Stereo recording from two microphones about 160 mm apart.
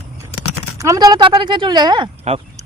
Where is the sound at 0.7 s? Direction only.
20° right (ahead or behind).